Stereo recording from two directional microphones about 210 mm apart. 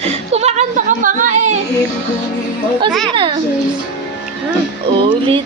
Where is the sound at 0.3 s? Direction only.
30° right (ahead or behind).